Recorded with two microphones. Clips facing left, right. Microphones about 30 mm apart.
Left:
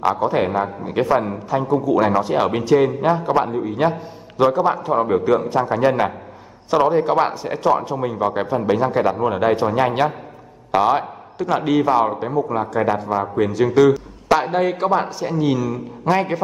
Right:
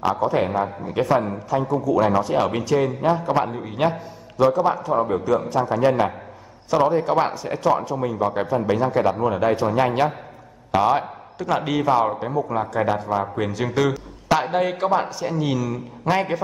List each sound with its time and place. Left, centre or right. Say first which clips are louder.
0.1 s a man's voice: left 2 dB; centre
3.4 s a man's voice: left 3 dB; centre
5.0 s a man's voice: left 4 dB; left; by 16.4 s centre